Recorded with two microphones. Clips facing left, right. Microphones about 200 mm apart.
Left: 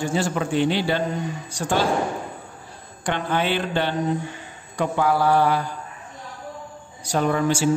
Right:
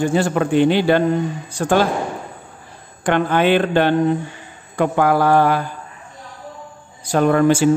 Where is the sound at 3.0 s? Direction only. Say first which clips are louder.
Right 7 dB; 55° right (ahead or behind).